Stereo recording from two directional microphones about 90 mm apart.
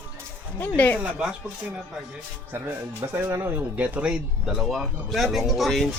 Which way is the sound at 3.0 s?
20° right (ahead or behind).